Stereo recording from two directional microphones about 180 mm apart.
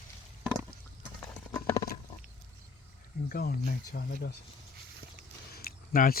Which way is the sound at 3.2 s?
55° left (ahead or behind).